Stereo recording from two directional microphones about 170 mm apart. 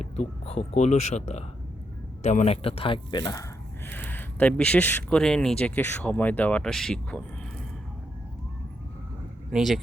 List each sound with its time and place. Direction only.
0.0 s speech: 40° left (ahead or behind); by 3.4 s 25° left (ahead or behind)
3.8 s speech: 10° left (ahead or behind)
9.5 s speech: centre (ahead or behind)